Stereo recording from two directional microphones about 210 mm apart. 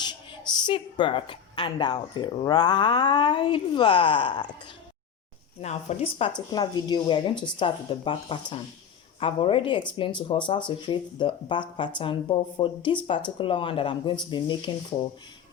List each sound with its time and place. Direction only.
0.6 s speech: 20° left (ahead or behind)
5.5 s speech: 30° left (ahead or behind)